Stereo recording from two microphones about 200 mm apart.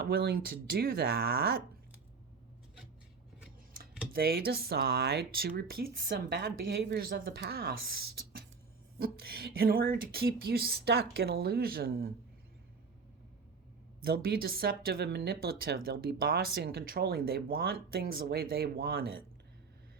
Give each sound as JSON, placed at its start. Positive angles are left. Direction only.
{"t": 0.0, "sound": "speech", "side_deg": -50}
{"t": 4.1, "sound": "speech", "side_deg": -50}
{"t": 14.0, "sound": "speech", "side_deg": -50}